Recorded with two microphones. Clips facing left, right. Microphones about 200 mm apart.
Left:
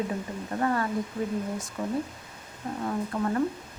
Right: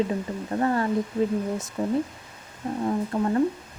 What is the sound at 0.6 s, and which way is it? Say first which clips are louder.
Speech: right 3 dB; 30° right (ahead or behind).